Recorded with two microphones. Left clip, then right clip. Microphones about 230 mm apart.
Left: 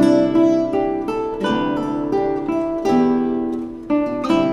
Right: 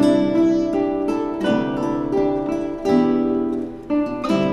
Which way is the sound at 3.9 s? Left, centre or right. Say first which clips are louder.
Left 3 dB; left.